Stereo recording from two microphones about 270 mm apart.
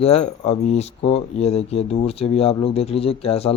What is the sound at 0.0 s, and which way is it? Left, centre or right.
Speech, left.